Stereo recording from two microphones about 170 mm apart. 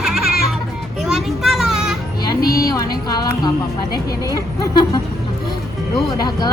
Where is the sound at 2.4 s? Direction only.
60° left (ahead or behind).